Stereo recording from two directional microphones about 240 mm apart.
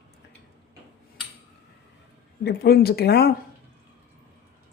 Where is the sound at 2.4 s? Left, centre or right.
Left.